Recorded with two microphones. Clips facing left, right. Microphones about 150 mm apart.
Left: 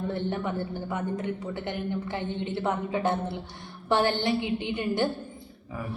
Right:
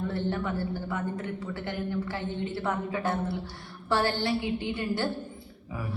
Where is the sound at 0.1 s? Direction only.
20° left (ahead or behind).